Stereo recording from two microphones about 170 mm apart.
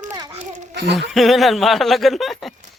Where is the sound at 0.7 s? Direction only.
85° right.